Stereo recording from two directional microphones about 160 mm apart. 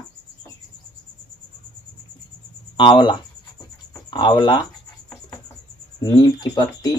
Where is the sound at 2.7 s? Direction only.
30° left (ahead or behind).